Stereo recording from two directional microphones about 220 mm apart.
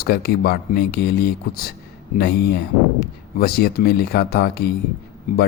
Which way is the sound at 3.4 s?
45° left (ahead or behind).